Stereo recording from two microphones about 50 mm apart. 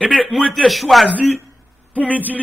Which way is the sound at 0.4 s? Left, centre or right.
Centre.